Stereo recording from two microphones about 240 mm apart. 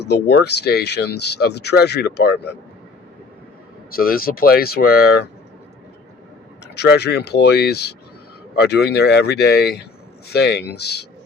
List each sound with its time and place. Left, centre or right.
0.0 s speech: left
3.9 s speech: left
6.7 s speech: left